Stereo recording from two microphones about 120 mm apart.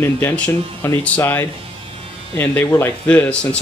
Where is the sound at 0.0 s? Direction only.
20° left (ahead or behind).